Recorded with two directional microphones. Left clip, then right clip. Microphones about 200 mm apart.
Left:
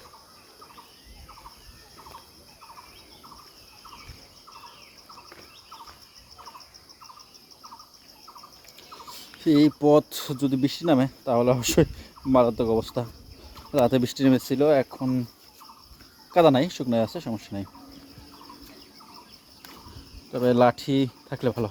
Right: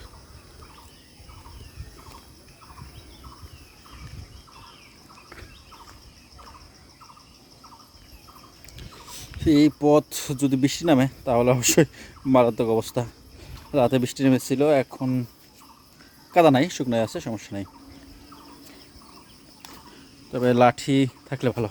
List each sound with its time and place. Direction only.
9.1 s speech: 15° right (ahead or behind)
13.7 s speech: 15° right (ahead or behind)
16.3 s speech: 20° right (ahead or behind)
20.3 s speech: 25° right (ahead or behind)